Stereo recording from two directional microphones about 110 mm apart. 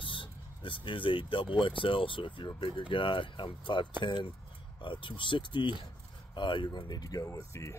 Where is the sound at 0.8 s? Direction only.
50° left (ahead or behind).